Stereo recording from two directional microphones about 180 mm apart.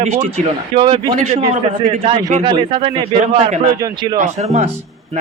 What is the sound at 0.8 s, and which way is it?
A man's voice, 30° right (ahead or behind).